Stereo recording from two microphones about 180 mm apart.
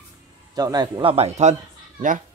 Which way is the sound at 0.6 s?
20° right (ahead or behind).